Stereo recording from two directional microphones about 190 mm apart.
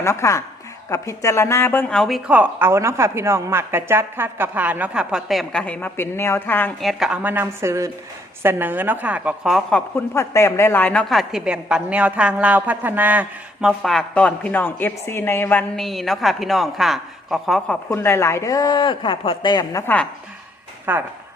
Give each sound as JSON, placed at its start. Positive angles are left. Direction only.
{"t": 0.0, "sound": "a woman's voice", "side_deg": 15}
{"t": 7.0, "sound": "a woman's voice", "side_deg": -5}
{"t": 17.8, "sound": "speech", "side_deg": 15}
{"t": 20.9, "sound": "a woman's voice", "side_deg": -10}